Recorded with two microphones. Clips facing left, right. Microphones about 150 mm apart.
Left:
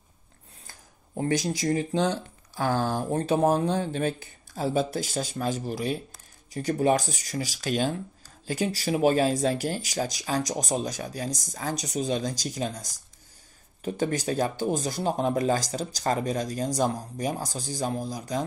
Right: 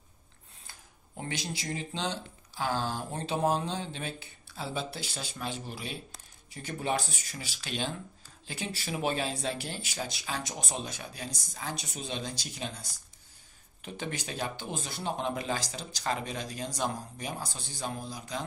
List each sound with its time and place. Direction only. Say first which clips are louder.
0.7 s speech: left 2 dB; 45° left (ahead or behind)